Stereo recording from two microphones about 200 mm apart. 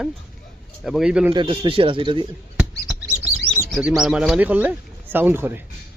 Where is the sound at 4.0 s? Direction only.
Centre (ahead or behind).